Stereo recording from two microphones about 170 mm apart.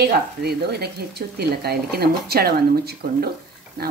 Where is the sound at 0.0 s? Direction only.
70° right (ahead or behind).